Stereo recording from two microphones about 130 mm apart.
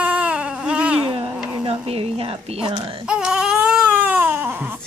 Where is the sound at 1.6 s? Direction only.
50° right (ahead or behind).